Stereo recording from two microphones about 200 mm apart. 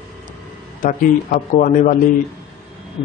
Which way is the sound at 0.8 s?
40° left (ahead or behind).